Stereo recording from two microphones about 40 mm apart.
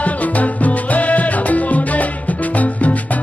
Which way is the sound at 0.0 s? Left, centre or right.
Left.